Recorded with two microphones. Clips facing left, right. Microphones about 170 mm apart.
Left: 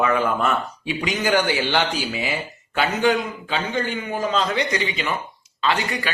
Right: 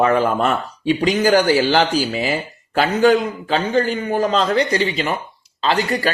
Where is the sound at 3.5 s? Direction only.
40° right (ahead or behind).